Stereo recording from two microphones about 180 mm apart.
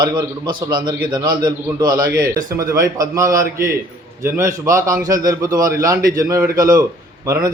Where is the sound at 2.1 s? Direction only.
55° right (ahead or behind).